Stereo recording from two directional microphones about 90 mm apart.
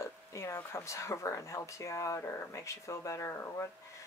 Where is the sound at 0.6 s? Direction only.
30° left (ahead or behind).